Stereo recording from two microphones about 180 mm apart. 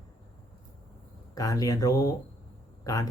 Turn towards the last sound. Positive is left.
turn(degrees=20)  # may be behind; listen again after turning